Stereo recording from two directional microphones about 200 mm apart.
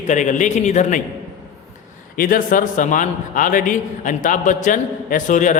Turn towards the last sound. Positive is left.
turn(degrees=40)  # may be behind; listen again after turning